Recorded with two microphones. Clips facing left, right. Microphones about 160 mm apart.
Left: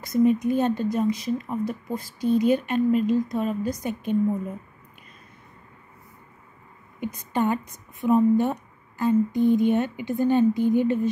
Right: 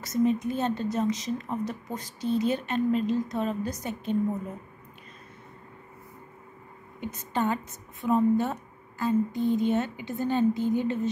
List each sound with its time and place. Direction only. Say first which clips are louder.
0.1 s speech: left 5 dB; 15° left (ahead or behind)
7.0 s speech: left 4 dB; 10° left (ahead or behind)